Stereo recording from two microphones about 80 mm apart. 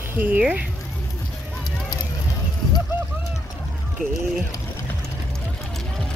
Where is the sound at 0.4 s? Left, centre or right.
Centre.